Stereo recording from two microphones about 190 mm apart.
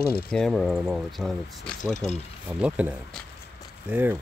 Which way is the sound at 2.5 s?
5° right (ahead or behind).